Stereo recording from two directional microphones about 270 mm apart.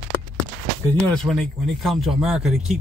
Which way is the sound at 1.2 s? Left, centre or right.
Centre.